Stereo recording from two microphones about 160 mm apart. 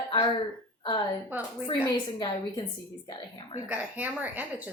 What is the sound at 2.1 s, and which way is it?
Speech, 30° left (ahead or behind).